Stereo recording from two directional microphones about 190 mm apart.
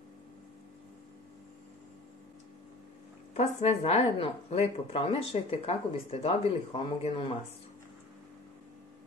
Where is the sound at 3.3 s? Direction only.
35° left (ahead or behind).